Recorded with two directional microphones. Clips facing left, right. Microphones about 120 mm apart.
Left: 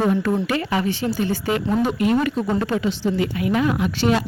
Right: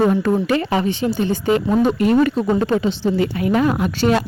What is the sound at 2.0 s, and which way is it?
A woman's voice, 40° right (ahead or behind).